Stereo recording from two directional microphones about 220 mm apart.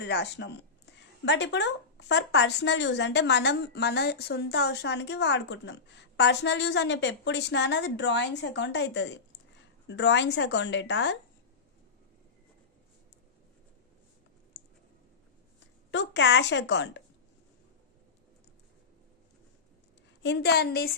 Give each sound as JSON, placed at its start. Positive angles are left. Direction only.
{"t": 0.0, "sound": "speech", "side_deg": 50}
{"t": 15.9, "sound": "speech", "side_deg": 55}
{"t": 20.2, "sound": "speech", "side_deg": 50}